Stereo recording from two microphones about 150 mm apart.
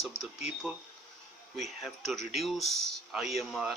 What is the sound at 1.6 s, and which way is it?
A man's voice, centre (ahead or behind).